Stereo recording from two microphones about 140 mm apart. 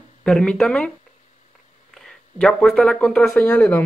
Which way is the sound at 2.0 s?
5° left (ahead or behind).